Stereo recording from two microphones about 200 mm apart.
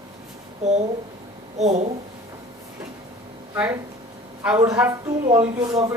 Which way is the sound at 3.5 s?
15° right (ahead or behind).